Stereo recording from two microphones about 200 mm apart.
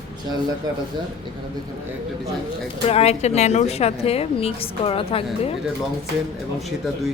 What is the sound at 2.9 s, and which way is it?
A woman's voice, 30° left (ahead or behind).